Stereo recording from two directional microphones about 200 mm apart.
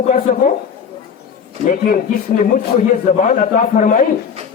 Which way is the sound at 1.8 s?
40° left (ahead or behind).